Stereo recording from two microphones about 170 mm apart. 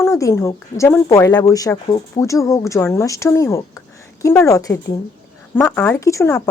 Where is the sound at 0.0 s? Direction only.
20° left (ahead or behind).